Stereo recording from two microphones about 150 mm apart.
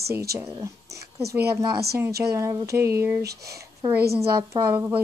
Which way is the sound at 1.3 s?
90° right.